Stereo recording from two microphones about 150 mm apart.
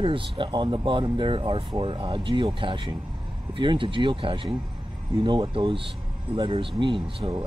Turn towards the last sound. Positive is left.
turn(degrees=-35)  # may be behind; listen again after turning